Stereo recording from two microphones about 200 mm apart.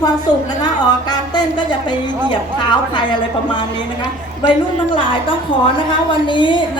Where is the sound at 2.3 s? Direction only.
20° left (ahead or behind).